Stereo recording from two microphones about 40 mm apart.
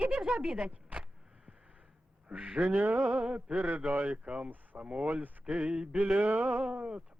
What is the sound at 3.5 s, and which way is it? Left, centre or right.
Speech, right.